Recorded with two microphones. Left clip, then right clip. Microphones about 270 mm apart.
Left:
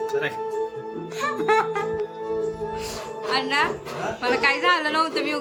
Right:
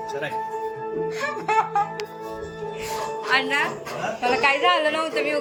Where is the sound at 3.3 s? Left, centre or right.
Centre.